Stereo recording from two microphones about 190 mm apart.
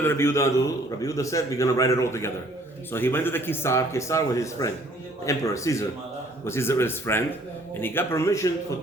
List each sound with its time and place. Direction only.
0.0 s speech: 10° left (ahead or behind)